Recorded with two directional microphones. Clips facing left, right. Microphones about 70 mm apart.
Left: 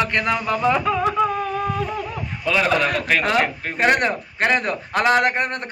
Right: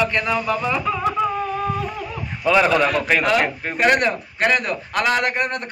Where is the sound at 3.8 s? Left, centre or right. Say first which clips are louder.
Right 1 dB; left.